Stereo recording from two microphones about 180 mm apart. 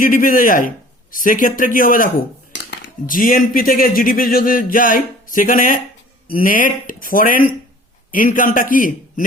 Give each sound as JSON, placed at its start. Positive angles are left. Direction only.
{"t": 0.0, "sound": "speech", "side_deg": 50}